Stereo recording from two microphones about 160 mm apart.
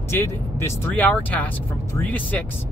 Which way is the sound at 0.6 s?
15° left (ahead or behind).